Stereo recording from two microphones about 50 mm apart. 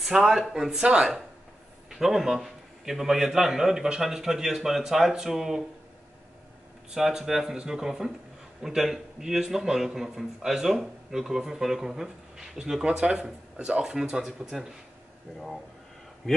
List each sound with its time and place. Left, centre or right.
0.0 s a man's voice: centre
1.9 s a man's voice: centre
6.9 s a man's voice: centre